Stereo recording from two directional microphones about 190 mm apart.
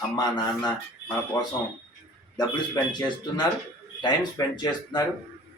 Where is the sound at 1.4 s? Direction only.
15° left (ahead or behind).